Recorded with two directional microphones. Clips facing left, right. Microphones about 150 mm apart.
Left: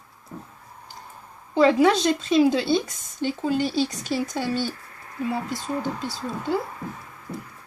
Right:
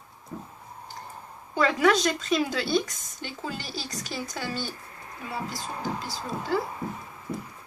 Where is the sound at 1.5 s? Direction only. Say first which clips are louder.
Left 5 dB; 25° left (ahead or behind).